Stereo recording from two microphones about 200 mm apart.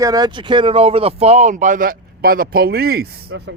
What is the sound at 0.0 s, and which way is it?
Speech, 20° right (ahead or behind).